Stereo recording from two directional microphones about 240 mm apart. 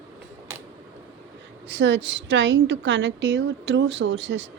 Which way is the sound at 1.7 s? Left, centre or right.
Right.